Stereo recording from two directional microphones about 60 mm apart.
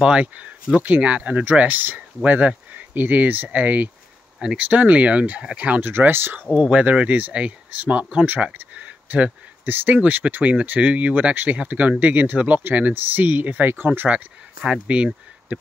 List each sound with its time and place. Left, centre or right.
0.0 s speech: centre
5.9 s speech: right
6.5 s speech: right
8.5 s a sound: right
9.7 s speech: right; by 15.6 s centre